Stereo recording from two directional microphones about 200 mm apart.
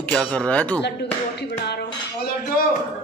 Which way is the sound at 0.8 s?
55° left (ahead or behind).